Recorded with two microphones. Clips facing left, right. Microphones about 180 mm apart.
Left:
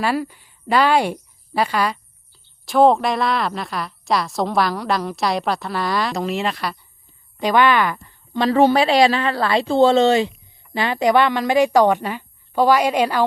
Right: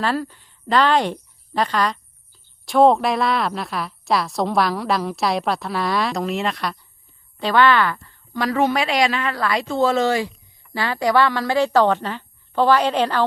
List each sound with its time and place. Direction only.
0.0 s speech: 10° left (ahead or behind)
7.3 s a woman's voice: 15° left (ahead or behind)